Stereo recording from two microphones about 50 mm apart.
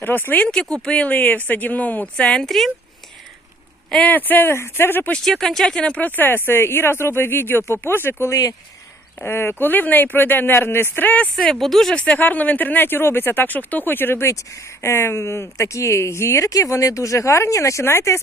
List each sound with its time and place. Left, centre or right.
0.0 s speech: left
0.4 s speech: centre; by 2.0 s left
2.1 s speech: centre
2.4 s speech: centre
4.0 s speech: left
5.2 s speech: centre
5.6 s speech: centre
6.0 s speech: left
11.5 s speech: centre
12.1 s speech: left
14.3 s speech: left